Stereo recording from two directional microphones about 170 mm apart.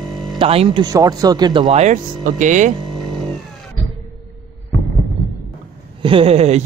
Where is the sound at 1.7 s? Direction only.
45° right (ahead or behind).